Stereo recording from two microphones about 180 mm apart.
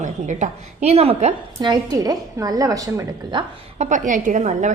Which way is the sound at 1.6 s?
25° right (ahead or behind).